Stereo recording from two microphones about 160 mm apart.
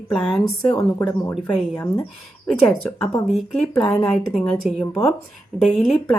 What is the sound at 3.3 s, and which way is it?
Speech, 10° left (ahead or behind).